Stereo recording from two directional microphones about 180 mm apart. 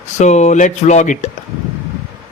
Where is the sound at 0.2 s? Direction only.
40° left (ahead or behind).